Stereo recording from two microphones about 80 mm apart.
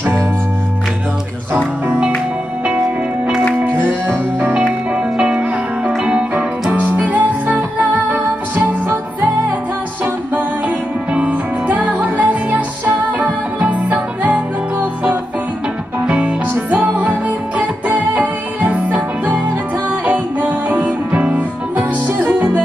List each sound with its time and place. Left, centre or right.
1.9 s music: centre
3.6 s music: right
11.1 s music: centre